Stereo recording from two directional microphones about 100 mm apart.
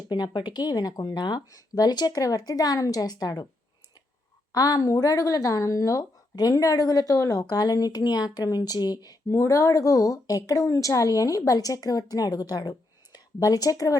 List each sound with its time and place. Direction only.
0.1 s a woman's voice: 45° left (ahead or behind)
4.5 s a woman's voice: 40° left (ahead or behind)
9.3 s a woman's voice: 30° left (ahead or behind)